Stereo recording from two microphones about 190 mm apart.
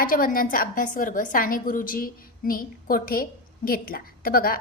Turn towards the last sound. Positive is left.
turn(degrees=50)  # may be behind; listen again after turning